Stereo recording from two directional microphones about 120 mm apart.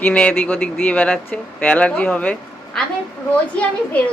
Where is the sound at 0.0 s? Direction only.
10° left (ahead or behind).